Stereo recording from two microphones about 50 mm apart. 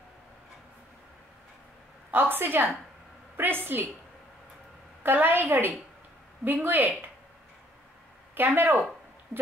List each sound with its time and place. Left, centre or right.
2.0 s a woman's voice: right
5.0 s a woman's voice: right
8.5 s speech: right